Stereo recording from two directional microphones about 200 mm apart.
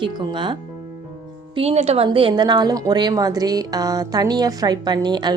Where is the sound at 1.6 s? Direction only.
30° right (ahead or behind).